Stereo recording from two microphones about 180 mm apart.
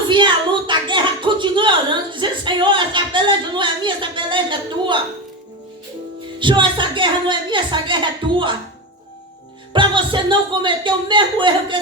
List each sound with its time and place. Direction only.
0.1 s a sound: 25° right (ahead or behind)
6.4 s a woman's voice: 25° right (ahead or behind)
9.7 s a woman's voice: 25° right (ahead or behind)